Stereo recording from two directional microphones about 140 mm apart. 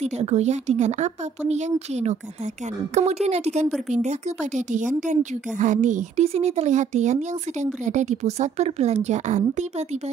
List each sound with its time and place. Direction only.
0.0 s a woman's voice: 50° right (ahead or behind)